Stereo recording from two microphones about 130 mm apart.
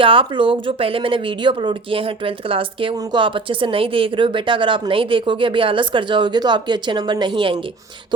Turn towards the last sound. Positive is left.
turn(degrees=-40)  # may be behind; listen again after turning